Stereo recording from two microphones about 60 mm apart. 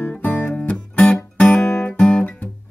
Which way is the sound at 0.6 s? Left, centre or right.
Left.